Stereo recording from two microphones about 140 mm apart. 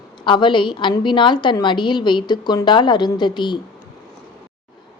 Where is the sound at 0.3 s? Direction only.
35° left (ahead or behind).